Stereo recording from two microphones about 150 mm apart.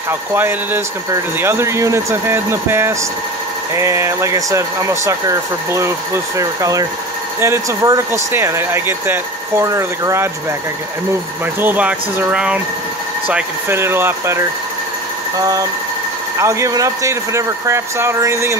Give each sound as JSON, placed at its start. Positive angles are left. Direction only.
{"t": 0.3, "sound": "speech", "side_deg": -15}
{"t": 11.6, "sound": "speech", "side_deg": -10}